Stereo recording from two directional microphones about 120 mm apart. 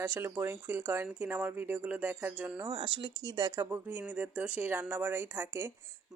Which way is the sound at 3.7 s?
15° right (ahead or behind).